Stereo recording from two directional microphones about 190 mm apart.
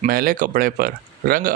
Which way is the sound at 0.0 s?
45° right (ahead or behind).